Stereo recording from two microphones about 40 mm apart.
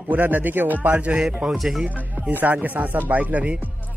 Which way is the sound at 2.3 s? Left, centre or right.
Right.